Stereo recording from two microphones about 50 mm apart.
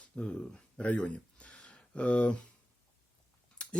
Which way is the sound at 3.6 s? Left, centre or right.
Left.